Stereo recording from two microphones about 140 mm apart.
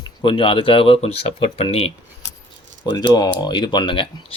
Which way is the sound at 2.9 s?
30° left (ahead or behind).